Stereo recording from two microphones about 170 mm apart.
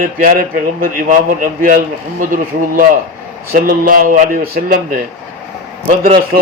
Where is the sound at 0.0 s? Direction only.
55° right (ahead or behind).